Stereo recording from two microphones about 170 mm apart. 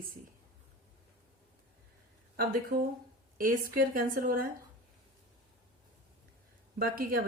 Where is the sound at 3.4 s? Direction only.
55° right (ahead or behind).